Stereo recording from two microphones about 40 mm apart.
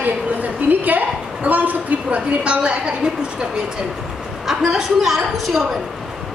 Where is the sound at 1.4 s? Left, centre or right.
Right.